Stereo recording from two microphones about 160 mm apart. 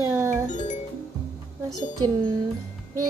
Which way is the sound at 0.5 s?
50° left (ahead or behind).